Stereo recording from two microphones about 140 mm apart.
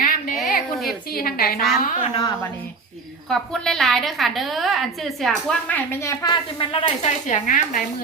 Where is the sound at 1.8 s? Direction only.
70° left (ahead or behind).